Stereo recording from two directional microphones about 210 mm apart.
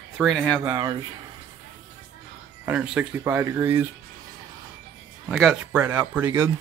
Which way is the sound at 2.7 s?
5° right (ahead or behind).